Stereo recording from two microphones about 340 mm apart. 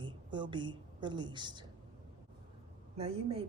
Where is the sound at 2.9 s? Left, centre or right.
Centre.